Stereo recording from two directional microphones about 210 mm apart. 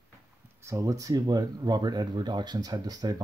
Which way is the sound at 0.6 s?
15° right (ahead or behind).